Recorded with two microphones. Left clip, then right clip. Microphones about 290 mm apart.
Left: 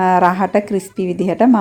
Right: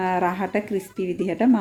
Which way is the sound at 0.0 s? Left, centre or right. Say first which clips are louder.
Left 10 dB; left.